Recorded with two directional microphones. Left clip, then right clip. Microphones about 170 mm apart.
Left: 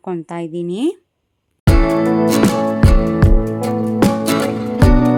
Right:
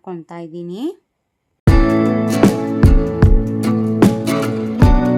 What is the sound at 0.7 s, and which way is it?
Speech, 10° left (ahead or behind).